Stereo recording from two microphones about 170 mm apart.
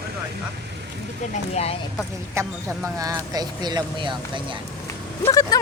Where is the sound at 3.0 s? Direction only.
20° right (ahead or behind).